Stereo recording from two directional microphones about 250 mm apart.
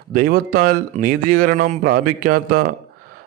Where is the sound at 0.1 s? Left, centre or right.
Right.